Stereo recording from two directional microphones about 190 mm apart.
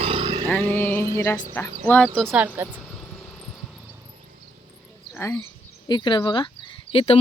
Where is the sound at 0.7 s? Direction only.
10° left (ahead or behind).